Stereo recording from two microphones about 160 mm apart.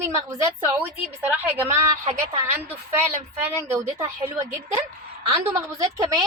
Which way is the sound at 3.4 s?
15° right (ahead or behind).